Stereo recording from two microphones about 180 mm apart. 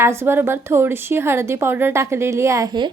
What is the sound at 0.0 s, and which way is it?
A woman's voice, 15° right (ahead or behind).